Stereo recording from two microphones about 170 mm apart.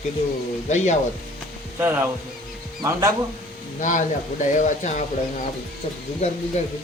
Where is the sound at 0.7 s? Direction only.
45° left (ahead or behind).